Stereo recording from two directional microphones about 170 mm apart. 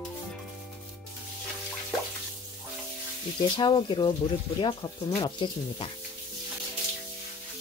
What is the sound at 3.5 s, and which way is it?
Speech, 30° left (ahead or behind).